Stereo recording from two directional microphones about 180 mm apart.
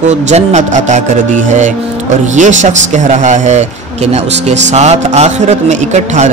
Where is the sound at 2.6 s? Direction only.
40° right (ahead or behind).